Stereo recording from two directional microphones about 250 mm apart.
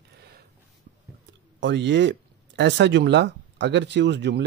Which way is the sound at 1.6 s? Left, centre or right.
Right.